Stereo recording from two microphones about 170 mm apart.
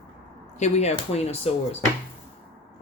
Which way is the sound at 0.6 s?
40° left (ahead or behind).